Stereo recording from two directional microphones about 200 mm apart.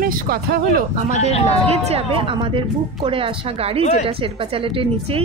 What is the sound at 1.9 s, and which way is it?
Speech, 30° right (ahead or behind).